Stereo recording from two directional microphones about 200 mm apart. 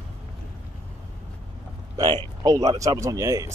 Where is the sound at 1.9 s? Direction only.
20° right (ahead or behind).